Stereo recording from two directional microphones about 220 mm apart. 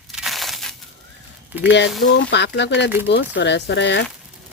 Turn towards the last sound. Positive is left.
turn(degrees=55)  # may be behind; listen again after turning